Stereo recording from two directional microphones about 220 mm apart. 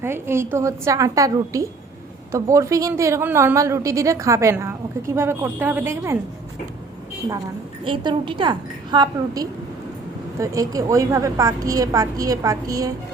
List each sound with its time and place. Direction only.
0.0 s a woman's voice: 10° right (ahead or behind)
7.9 s a woman's voice: 20° right (ahead or behind)